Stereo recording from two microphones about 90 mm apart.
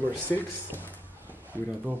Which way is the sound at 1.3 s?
20° right (ahead or behind).